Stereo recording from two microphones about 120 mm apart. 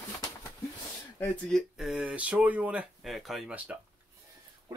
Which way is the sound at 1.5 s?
5° right (ahead or behind).